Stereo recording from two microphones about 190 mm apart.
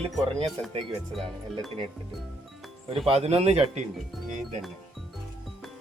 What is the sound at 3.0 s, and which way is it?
Speech, 30° right (ahead or behind).